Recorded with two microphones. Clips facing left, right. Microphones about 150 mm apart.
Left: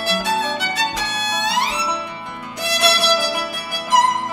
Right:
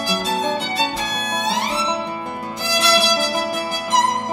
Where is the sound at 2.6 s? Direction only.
65° left (ahead or behind).